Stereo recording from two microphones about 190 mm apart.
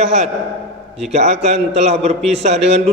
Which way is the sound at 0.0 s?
35° right (ahead or behind).